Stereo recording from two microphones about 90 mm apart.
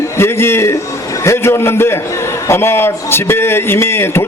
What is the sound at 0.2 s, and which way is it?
A man's voice, 25° left (ahead or behind).